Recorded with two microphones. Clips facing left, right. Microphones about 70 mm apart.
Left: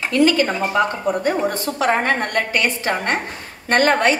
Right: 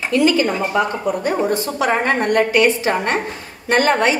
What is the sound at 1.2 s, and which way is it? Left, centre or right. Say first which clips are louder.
Speech: right 1 dB; left.